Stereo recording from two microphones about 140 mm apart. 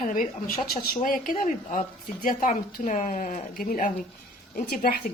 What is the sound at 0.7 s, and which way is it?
A woman's voice, 90° left.